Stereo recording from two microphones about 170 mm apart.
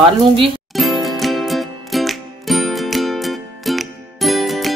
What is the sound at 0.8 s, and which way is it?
Music, centre (ahead or behind).